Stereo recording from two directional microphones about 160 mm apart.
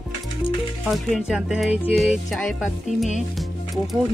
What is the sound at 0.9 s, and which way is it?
Music, centre (ahead or behind).